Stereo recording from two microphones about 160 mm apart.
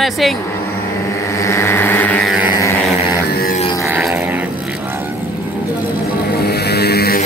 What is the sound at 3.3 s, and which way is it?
Music, 75° left (ahead or behind).